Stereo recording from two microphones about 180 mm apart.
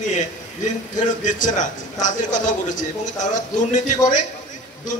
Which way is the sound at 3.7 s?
45° left (ahead or behind).